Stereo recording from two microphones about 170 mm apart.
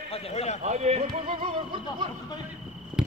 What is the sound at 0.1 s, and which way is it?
Speech, 35° left (ahead or behind).